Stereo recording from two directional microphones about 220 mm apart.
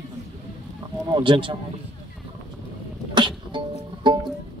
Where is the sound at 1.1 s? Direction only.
20° right (ahead or behind).